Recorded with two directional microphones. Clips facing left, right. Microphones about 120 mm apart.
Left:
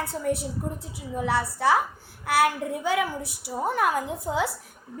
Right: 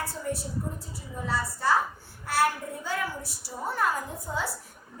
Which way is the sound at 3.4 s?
65° left (ahead or behind).